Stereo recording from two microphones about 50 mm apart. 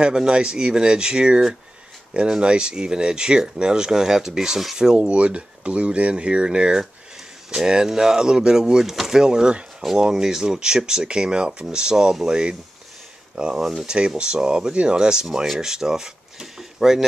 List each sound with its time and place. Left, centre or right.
0.0 s speech: centre
4.7 s speech: centre